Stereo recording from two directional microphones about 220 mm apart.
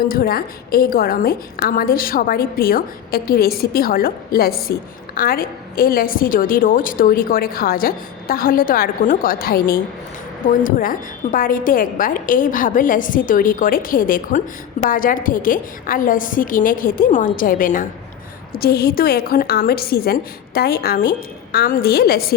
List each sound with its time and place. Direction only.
0.1 s a woman's voice: 40° left (ahead or behind)